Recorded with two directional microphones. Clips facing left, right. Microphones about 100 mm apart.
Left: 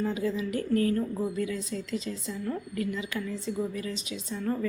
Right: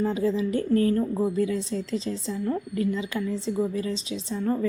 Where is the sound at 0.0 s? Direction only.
30° right (ahead or behind).